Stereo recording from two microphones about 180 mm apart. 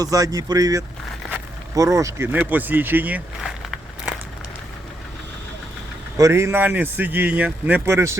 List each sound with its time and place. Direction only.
0.0 s speech: 20° right (ahead or behind)
6.1 s speech: 15° right (ahead or behind)